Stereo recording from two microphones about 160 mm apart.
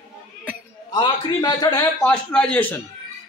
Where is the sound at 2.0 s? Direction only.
5° left (ahead or behind).